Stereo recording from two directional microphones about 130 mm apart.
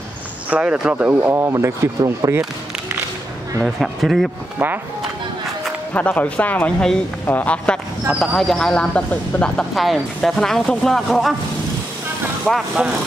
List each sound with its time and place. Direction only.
0.5 s speech: 10° right (ahead or behind)
3.6 s speech: centre (ahead or behind)
5.9 s speech: 10° left (ahead or behind)
12.4 s speech: centre (ahead or behind)